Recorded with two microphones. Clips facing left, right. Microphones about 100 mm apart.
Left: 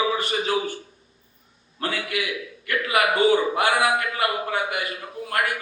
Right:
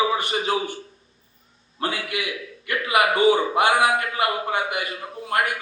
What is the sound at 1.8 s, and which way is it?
A man's voice, 25° right (ahead or behind).